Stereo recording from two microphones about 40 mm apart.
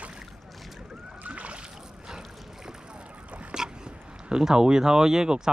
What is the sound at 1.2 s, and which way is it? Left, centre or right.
Rowboat, right.